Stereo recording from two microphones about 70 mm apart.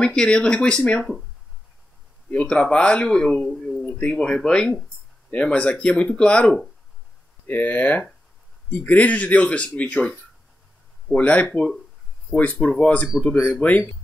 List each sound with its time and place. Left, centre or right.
0.0 s speech: centre
2.3 s speech: centre
11.1 s speech: centre